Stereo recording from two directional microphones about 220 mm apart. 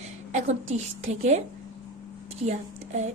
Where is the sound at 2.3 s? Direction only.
30° right (ahead or behind).